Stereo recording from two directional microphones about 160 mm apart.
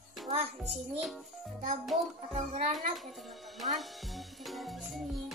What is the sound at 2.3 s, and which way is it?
Speech, 50° right (ahead or behind).